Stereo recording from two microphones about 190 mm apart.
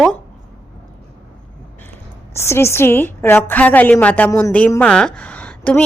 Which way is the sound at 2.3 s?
15° left (ahead or behind).